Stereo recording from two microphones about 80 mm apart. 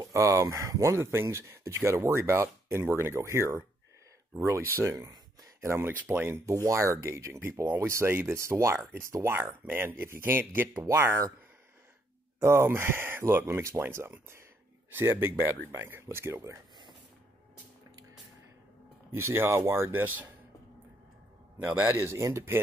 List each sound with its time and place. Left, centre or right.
0.0 s speech: right
4.9 s a sound: right
5.6 s speech: right
12.4 s speech: right
19.1 s speech: right
21.6 s speech: right
22.0 s speech: right